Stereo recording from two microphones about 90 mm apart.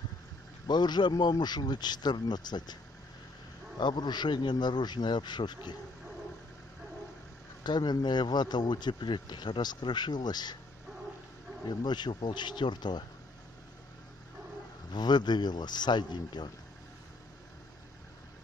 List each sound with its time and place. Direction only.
0.7 s speech: 55° left (ahead or behind)
7.6 s speech: 55° left (ahead or behind)
11.6 s speech: 55° left (ahead or behind)
14.9 s speech: 55° left (ahead or behind)